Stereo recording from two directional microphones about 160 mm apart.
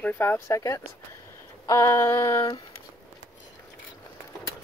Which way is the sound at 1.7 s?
20° left (ahead or behind).